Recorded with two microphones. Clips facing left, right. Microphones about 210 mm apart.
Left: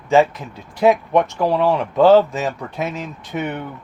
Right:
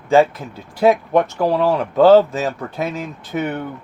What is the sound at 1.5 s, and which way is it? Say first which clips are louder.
Speech: even; 40° right (ahead or behind).